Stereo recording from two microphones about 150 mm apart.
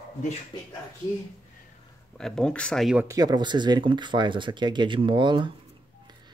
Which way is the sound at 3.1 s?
25° right (ahead or behind).